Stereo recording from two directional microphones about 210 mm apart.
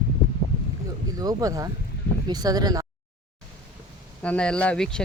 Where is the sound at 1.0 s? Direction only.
15° right (ahead or behind).